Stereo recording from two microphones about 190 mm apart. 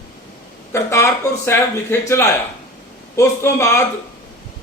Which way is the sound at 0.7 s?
15° left (ahead or behind).